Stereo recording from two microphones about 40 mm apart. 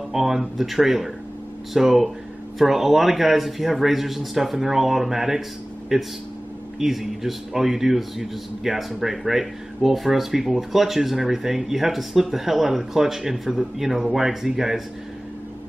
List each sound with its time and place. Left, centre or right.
0.1 s a man's voice: centre